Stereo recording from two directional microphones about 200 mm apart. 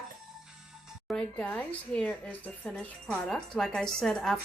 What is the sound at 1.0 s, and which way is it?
Speech, 5° left (ahead or behind).